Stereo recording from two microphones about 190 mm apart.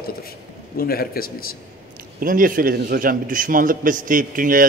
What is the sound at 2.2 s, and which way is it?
A man's voice, 45° right (ahead or behind).